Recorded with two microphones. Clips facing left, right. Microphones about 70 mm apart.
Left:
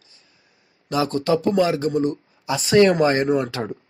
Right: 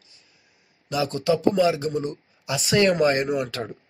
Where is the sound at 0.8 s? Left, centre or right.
Left.